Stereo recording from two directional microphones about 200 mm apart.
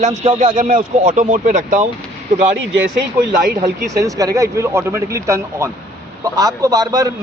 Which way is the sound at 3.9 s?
15° right (ahead or behind).